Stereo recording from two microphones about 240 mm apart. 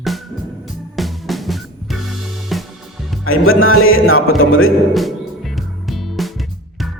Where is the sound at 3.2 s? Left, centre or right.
Left.